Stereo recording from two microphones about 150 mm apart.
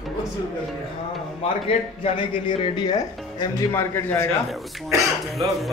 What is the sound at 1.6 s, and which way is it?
Speech, 35° left (ahead or behind).